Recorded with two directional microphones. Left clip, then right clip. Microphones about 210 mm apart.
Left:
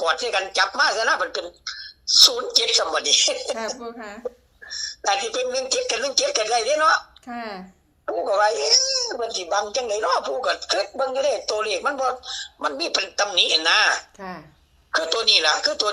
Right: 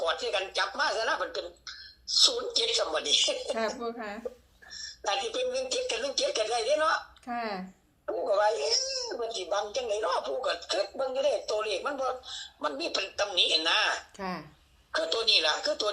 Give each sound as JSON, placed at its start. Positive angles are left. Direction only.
{"t": 0.0, "sound": "speech", "side_deg": 50}
{"t": 3.8, "sound": "a woman's voice", "side_deg": 0}
{"t": 4.7, "sound": "speech", "side_deg": 50}
{"t": 7.3, "sound": "a woman's voice", "side_deg": 5}
{"t": 8.0, "sound": "speech", "side_deg": 50}
{"t": 14.2, "sound": "speech", "side_deg": -5}
{"t": 14.9, "sound": "speech", "side_deg": 50}